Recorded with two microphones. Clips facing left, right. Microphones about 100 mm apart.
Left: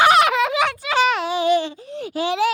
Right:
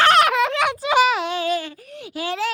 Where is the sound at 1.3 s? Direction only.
15° left (ahead or behind).